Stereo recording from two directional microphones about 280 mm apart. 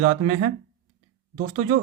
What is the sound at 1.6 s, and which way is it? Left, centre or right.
Speech, right.